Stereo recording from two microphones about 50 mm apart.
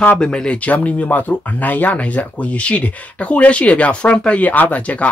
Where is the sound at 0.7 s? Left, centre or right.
Left.